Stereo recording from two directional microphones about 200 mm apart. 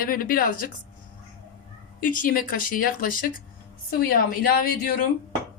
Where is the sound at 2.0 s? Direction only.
40° left (ahead or behind).